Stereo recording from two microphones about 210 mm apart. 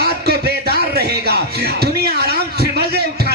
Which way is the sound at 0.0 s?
50° right (ahead or behind).